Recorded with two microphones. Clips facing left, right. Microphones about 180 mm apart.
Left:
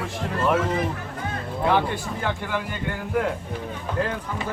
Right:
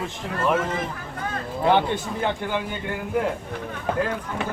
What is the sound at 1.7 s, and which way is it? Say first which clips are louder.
Speech: right 2 dB; 25° right (ahead or behind).